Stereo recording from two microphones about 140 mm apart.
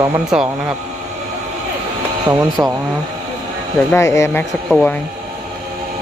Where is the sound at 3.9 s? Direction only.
20° left (ahead or behind).